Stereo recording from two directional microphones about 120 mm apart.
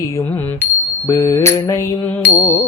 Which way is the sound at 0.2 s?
20° left (ahead or behind).